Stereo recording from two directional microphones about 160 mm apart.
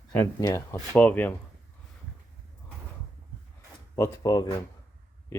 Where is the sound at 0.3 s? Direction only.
20° left (ahead or behind).